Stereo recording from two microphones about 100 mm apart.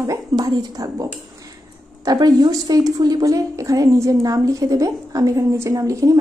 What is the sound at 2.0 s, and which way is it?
A woman's voice, 45° right (ahead or behind).